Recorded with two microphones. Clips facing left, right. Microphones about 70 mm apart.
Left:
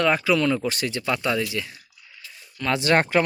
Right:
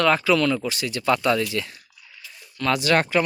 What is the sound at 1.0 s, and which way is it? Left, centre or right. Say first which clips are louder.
Speech: right 6 dB; centre.